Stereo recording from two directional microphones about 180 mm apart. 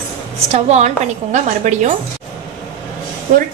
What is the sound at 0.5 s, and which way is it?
A woman's voice, 40° right (ahead or behind).